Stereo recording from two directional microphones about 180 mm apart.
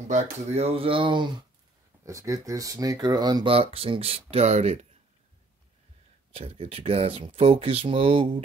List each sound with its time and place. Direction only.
0.1 s speech: 35° right (ahead or behind)
6.3 s speech: 30° right (ahead or behind)